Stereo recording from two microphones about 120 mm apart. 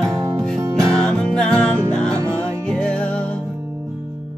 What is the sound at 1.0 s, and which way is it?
Music, 5° left (ahead or behind).